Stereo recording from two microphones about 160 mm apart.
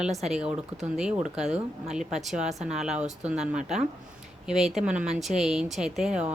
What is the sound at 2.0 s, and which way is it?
Speech, 45° right (ahead or behind).